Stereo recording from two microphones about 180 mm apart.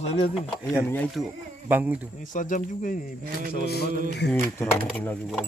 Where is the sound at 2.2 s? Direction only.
45° left (ahead or behind).